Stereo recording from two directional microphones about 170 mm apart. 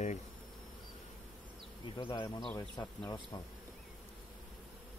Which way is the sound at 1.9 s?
30° left (ahead or behind).